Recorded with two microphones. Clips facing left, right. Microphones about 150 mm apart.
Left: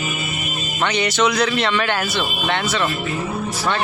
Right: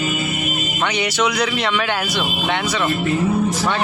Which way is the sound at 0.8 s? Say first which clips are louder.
Left 2 dB; 10° right (ahead or behind).